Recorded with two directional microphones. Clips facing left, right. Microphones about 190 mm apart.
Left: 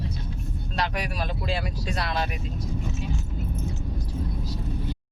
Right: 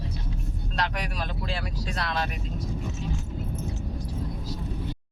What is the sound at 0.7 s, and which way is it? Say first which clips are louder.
Speech: left 2 dB; 5° left (ahead or behind).